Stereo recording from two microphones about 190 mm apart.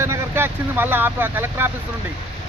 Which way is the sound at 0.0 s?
15° right (ahead or behind).